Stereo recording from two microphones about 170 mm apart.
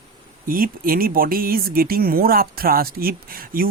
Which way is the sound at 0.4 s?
55° right (ahead or behind).